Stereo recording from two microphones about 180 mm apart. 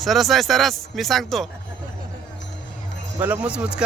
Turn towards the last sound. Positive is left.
turn(degrees=-5)  # may be behind; listen again after turning